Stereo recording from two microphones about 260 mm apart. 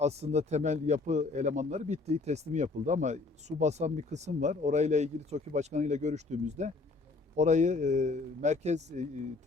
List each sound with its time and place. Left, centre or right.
0.0 s a man's voice: right